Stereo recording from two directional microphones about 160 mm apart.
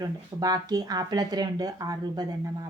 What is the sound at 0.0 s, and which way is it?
Speech, 25° right (ahead or behind).